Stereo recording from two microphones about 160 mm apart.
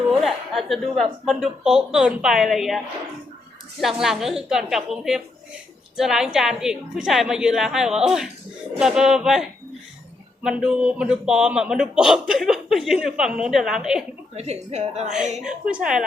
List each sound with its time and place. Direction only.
0.1 s a man's voice: centre (ahead or behind)
14.3 s a woman's voice: 40° right (ahead or behind)
15.4 s a man's voice: 5° right (ahead or behind)